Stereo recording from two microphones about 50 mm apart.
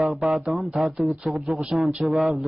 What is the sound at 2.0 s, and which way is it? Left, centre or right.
Speech, centre.